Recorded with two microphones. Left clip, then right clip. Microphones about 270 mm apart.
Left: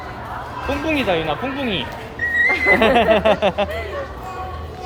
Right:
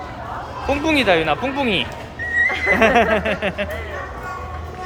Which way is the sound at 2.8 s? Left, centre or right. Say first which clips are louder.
Left 1 dB; centre.